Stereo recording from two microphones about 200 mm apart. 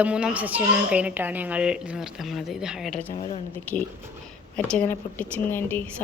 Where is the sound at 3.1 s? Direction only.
30° left (ahead or behind).